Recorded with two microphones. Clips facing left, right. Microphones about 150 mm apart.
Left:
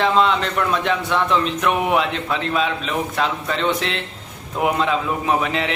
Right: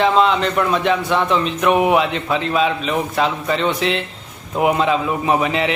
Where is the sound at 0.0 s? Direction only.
5° right (ahead or behind).